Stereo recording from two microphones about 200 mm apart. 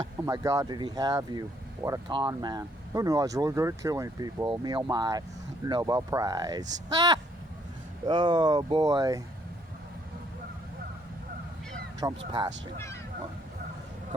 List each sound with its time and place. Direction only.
0.2 s speech: 15° right (ahead or behind)
12.3 s speech: 20° right (ahead or behind)